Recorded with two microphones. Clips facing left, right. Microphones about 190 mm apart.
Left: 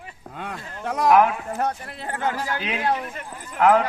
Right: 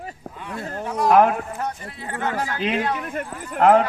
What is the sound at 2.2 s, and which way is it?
Speech, 55° right (ahead or behind).